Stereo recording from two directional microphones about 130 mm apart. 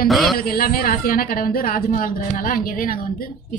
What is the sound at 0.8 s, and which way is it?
A woman's voice, 90° left.